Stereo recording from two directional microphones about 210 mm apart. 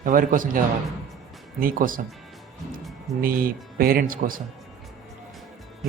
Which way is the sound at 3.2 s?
45° right (ahead or behind).